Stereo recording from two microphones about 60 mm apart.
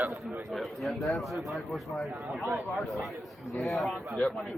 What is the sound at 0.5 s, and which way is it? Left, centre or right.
Speech, centre.